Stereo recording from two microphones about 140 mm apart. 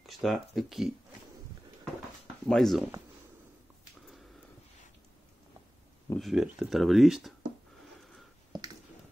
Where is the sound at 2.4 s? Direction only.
Centre (ahead or behind).